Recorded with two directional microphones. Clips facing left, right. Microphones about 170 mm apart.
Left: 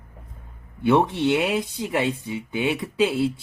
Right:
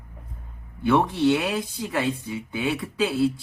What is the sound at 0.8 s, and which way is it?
Speech, 20° left (ahead or behind).